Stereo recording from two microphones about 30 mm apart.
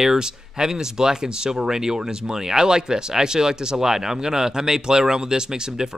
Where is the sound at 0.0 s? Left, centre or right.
Centre.